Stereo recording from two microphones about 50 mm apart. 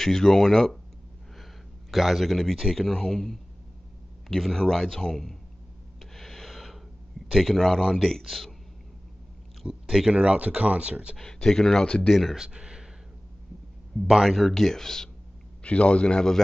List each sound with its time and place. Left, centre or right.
0.0 s a man's voice: centre
1.4 s a sound: centre
2.7 s a man's voice: centre
6.1 s a sound: centre
7.3 s a man's voice: centre
9.8 s speech: centre
11.1 s a man's voice: centre
11.8 s a man's voice: centre
12.1 s a man's voice: centre
12.4 s speech: centre
14.1 s a man's voice: centre
15.6 s a man's voice: left